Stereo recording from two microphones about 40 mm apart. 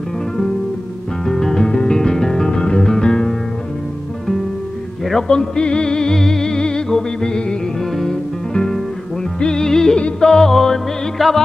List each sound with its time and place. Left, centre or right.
1.2 s music: centre
5.3 s music: left
7.8 s music: centre